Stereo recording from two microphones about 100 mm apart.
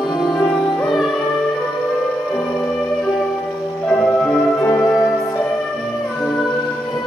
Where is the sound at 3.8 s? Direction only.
10° left (ahead or behind).